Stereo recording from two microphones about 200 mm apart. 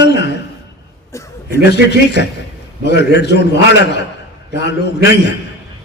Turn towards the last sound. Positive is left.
turn(degrees=60)  # may be behind; listen again after turning